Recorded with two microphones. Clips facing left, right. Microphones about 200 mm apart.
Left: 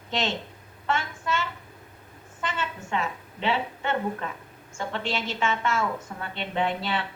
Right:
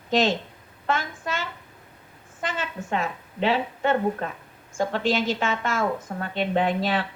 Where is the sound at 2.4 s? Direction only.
40° right (ahead or behind).